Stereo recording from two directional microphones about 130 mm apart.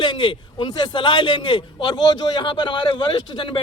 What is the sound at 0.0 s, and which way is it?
A man's voice, 40° left (ahead or behind).